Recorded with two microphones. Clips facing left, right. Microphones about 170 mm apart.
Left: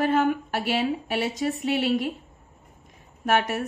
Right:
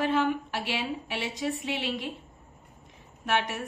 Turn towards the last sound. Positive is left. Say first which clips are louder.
# left 5 dB
turn(degrees=45)  # may be behind; listen again after turning